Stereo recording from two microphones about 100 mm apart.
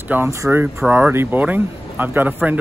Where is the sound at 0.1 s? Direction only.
25° right (ahead or behind).